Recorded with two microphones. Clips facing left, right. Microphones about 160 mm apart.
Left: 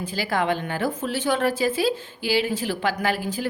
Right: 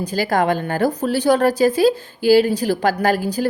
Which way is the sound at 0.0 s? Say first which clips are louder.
Right 6 dB; 40° right (ahead or behind).